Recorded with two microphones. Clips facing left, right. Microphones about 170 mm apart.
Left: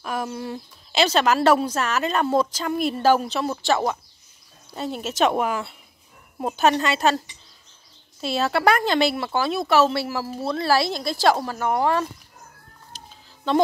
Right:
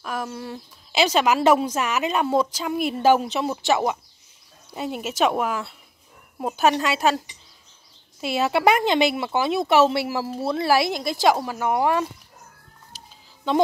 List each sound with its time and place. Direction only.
0.0 s speech: centre (ahead or behind)
1.0 s a woman's voice: 10° right (ahead or behind)